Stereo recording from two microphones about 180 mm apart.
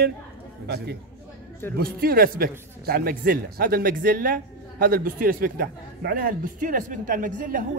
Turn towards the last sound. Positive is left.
turn(degrees=-50)  # may be behind; listen again after turning